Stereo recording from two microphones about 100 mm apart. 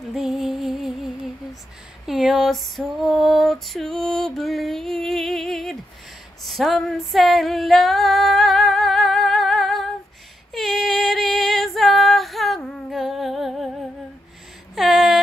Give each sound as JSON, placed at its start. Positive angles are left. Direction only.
{"t": 0.1, "sound": "music", "side_deg": 0}
{"t": 2.0, "sound": "female singing", "side_deg": -5}
{"t": 14.8, "sound": "a sound", "side_deg": 0}